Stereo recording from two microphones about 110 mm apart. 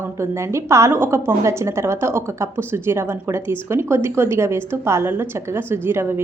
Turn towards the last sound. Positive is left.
turn(degrees=-20)  # may be behind; listen again after turning